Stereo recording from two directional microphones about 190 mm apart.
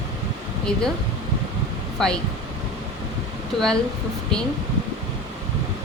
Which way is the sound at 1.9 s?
5° left (ahead or behind).